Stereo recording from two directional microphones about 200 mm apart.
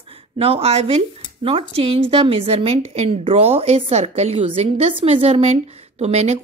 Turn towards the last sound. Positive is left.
turn(degrees=-35)  # may be behind; listen again after turning